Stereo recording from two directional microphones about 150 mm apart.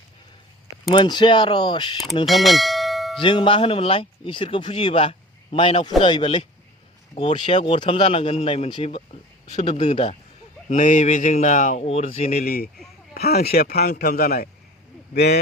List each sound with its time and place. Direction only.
0.9 s speech: 30° left (ahead or behind)
2.2 s bell: centre (ahead or behind)
3.2 s speech: 30° left (ahead or behind)
10.7 s speech: 60° left (ahead or behind)
11.8 s speech: 40° left (ahead or behind)
12.3 s a man's voice: 90° left